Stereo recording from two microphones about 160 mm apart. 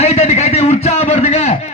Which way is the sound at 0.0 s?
40° left (ahead or behind).